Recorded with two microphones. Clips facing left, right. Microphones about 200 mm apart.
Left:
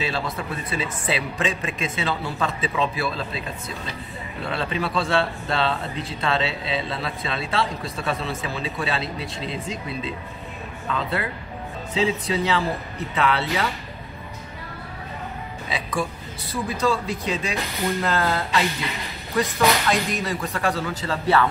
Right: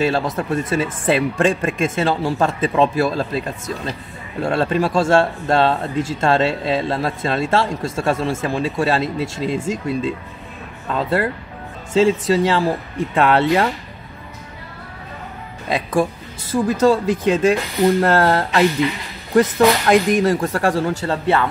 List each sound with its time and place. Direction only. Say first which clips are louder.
0.0 s a man's voice: right 8 dB; 50° right (ahead or behind)
15.7 s a man's voice: right 9 dB; 50° right (ahead or behind)
21.1 s speech: even; 25° right (ahead or behind)